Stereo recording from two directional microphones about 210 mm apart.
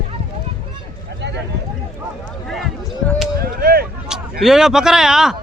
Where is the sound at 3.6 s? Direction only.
45° right (ahead or behind).